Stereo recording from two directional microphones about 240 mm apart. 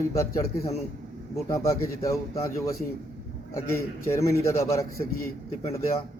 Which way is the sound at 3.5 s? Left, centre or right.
Centre.